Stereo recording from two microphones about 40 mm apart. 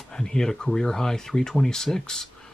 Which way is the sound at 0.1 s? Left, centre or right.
Centre.